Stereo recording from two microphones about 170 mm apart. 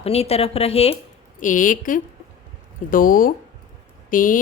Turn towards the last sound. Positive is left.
turn(degrees=50)  # may be behind; listen again after turning